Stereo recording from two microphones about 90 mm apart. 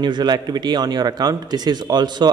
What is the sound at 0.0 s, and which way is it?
Speech, 55° right (ahead or behind).